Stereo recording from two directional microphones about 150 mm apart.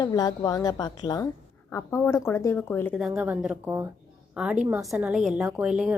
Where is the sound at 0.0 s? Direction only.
25° left (ahead or behind).